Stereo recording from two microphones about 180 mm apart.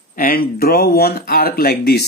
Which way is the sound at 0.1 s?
55° left (ahead or behind).